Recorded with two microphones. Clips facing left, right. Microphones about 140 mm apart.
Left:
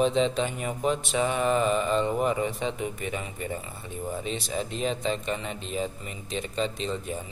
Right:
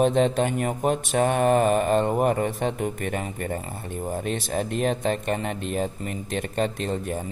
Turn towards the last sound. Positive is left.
turn(degrees=-55)  # may be behind; listen again after turning